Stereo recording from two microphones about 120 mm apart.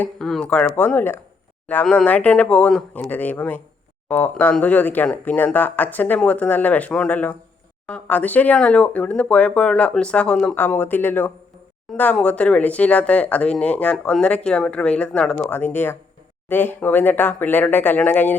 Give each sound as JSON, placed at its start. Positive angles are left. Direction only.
{"t": 0.0, "sound": "speech", "side_deg": 5}